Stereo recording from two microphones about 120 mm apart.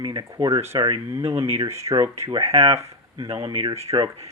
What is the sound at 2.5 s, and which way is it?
Speech, 55° right (ahead or behind).